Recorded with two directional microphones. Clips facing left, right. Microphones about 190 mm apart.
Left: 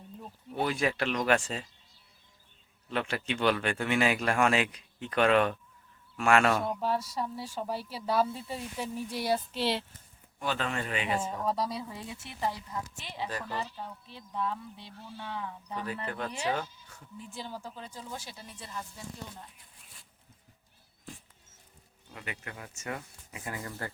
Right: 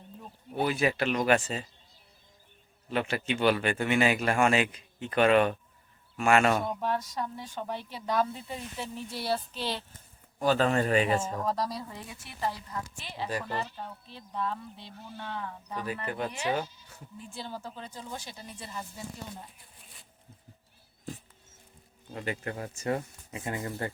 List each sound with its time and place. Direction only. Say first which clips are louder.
0.5 s speech: right 2 dB; 5° right (ahead or behind)
2.9 s speech: right 2 dB; 5° right (ahead or behind); by 9.4 s 15° left (ahead or behind)
9.5 s speech: left 4 dB; 70° left (ahead or behind)
10.4 s speech: right 8 dB; 40° right (ahead or behind)
11.4 s speech: even; 5° left (ahead or behind)
11.9 s speech: left 2 dB; 20° left (ahead or behind)
13.2 s speech: right 3 dB; 10° right (ahead or behind)
13.5 s speech: right 2 dB; 10° left (ahead or behind)
15.7 s speech: right 2 dB; 10° right (ahead or behind)
17.2 s speech: right 1 dB; 15° left (ahead or behind); by 19.5 s 10° right (ahead or behind)
22.1 s speech: right 8 dB; 35° right (ahead or behind)